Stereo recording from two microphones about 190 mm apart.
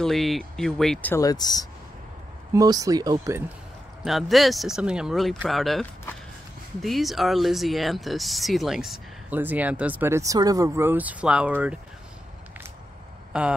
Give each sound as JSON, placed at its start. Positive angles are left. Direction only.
{"t": 0.0, "sound": "speech", "side_deg": 0}
{"t": 1.1, "sound": "speech", "side_deg": 20}
{"t": 2.5, "sound": "speech", "side_deg": -20}
{"t": 4.0, "sound": "speech", "side_deg": 0}
{"t": 13.3, "sound": "speech", "side_deg": -5}